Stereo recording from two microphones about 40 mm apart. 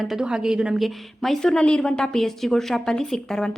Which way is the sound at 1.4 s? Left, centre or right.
Centre.